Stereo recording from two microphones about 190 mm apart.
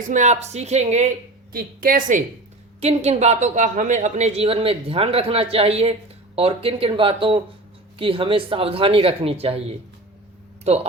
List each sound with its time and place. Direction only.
0.1 s a woman's voice: 40° right (ahead or behind)
1.5 s a woman's voice: 50° right (ahead or behind)
2.8 s a woman's voice: 35° right (ahead or behind)